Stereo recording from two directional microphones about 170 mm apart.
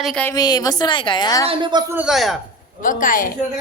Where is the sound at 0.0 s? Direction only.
Centre (ahead or behind).